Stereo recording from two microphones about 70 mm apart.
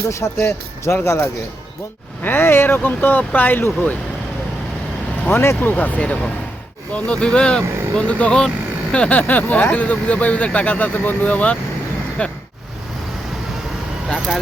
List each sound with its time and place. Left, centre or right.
0.2 s speech: left
5.3 s speech: left; by 12.3 s centre